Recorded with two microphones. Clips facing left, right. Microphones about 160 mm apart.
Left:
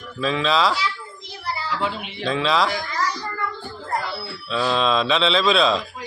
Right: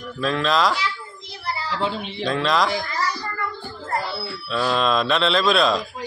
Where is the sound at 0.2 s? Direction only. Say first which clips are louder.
Even; centre (ahead or behind).